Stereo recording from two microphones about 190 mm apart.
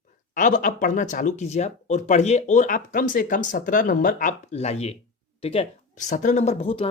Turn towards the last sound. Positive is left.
turn(degrees=30)  # may be behind; listen again after turning